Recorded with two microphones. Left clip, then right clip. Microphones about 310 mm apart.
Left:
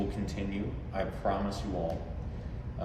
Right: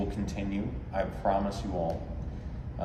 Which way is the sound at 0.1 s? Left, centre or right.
Centre.